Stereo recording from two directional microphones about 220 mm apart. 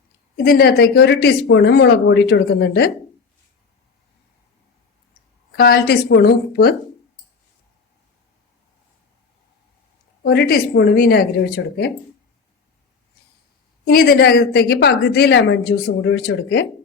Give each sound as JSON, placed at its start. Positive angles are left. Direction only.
{"t": 0.3, "sound": "a woman's voice", "side_deg": 45}
{"t": 5.5, "sound": "a woman's voice", "side_deg": 45}
{"t": 10.2, "sound": "a woman's voice", "side_deg": 45}
{"t": 13.8, "sound": "a woman's voice", "side_deg": 45}